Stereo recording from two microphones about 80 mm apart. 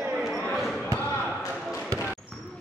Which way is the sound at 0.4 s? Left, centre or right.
Centre.